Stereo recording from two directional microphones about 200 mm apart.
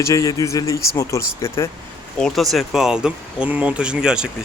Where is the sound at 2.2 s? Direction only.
Centre (ahead or behind).